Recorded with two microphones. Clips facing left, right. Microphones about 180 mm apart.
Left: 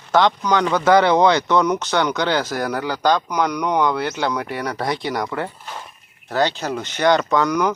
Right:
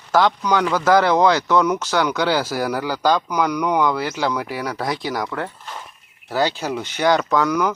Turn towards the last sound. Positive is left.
turn(degrees=-5)  # may be behind; listen again after turning